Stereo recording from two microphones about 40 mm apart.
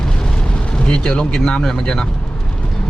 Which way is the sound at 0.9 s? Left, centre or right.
Centre.